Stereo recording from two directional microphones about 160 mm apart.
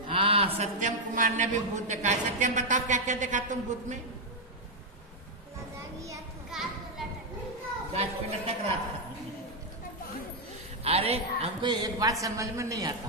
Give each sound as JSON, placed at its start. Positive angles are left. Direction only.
{"t": 0.1, "sound": "a sound", "side_deg": -35}
{"t": 0.7, "sound": "a man's voice", "side_deg": -55}
{"t": 5.9, "sound": "children playing", "side_deg": -20}
{"t": 6.5, "sound": "children playing", "side_deg": -5}
{"t": 7.9, "sound": "a woman's voice", "side_deg": -40}
{"t": 10.8, "sound": "a woman's voice", "side_deg": -40}
{"t": 11.7, "sound": "a man's voice", "side_deg": -25}